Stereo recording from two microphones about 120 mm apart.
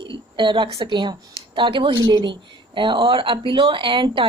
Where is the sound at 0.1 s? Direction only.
45° right (ahead or behind).